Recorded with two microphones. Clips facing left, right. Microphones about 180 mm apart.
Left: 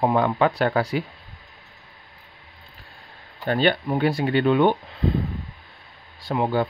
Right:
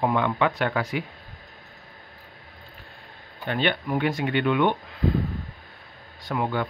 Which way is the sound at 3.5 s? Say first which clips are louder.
Left 4 dB; 35° left (ahead or behind).